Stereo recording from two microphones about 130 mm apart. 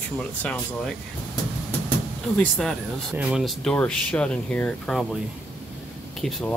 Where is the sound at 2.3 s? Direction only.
Centre (ahead or behind).